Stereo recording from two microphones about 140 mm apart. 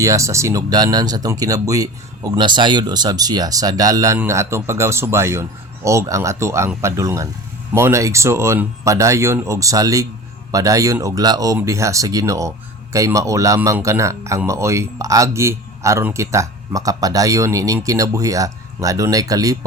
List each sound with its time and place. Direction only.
0.0 s speech: 20° right (ahead or behind)